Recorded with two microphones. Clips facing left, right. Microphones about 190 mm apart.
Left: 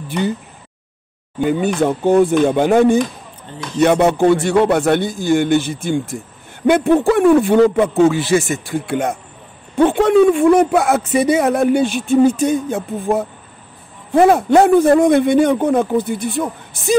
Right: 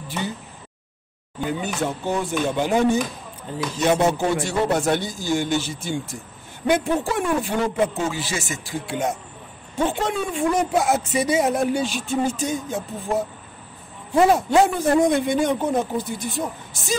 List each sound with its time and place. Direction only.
1.8 s a man's voice: 55° left (ahead or behind)